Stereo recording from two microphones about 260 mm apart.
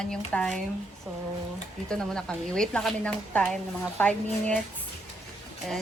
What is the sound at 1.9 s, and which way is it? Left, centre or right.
A woman's voice, centre.